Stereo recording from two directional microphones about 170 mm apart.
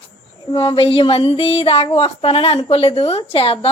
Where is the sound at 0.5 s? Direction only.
30° left (ahead or behind).